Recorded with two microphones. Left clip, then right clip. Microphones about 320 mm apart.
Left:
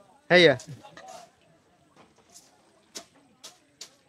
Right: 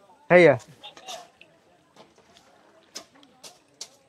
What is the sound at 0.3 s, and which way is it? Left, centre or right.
Speech, centre.